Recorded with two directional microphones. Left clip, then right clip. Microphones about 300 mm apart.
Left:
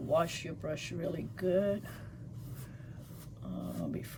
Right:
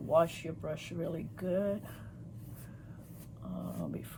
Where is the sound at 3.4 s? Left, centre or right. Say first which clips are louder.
Even; centre.